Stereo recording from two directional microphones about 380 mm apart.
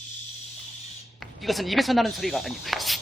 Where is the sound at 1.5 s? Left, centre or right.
Centre.